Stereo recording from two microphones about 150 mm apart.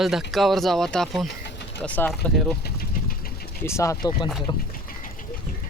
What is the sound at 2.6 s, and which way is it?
Vehicle, 80° left.